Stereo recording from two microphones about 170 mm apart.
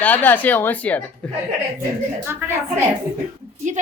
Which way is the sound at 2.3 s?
15° right (ahead or behind).